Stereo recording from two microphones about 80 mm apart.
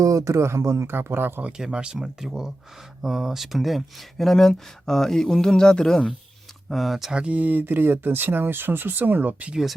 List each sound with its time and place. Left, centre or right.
0.0 s speech: right
1.5 s speech: centre